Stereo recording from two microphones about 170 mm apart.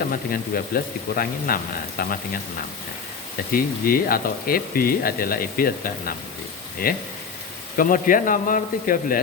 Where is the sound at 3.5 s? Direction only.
60° left (ahead or behind).